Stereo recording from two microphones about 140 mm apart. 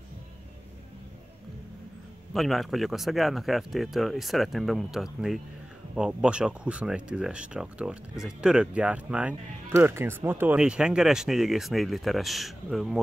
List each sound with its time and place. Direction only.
2.3 s speech: centre (ahead or behind)